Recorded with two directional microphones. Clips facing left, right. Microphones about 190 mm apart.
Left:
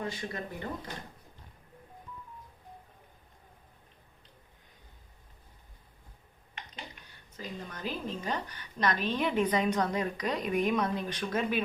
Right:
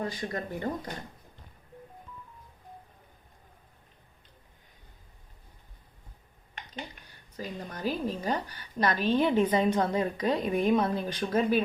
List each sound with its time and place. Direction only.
0.0 s speech: 40° right (ahead or behind)
7.3 s a woman's voice: 35° right (ahead or behind)